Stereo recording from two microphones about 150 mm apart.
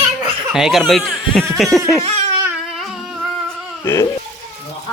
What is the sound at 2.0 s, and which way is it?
Crying, 45° right (ahead or behind).